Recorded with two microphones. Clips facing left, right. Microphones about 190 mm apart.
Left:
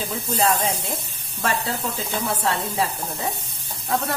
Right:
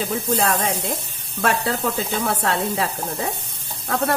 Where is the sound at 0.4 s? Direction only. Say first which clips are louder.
Left 4 dB; 65° right (ahead or behind).